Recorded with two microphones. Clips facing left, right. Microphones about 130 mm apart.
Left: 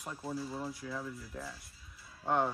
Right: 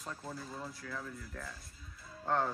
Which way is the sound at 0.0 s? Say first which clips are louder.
Left 4 dB; 10° left (ahead or behind).